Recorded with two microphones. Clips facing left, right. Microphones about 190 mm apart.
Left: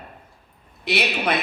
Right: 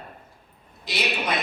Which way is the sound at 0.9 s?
65° left (ahead or behind).